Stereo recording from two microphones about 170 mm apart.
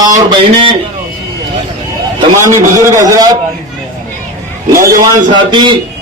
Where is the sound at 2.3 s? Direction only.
15° right (ahead or behind).